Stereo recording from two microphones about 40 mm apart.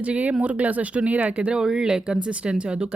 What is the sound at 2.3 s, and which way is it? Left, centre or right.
Speech, right.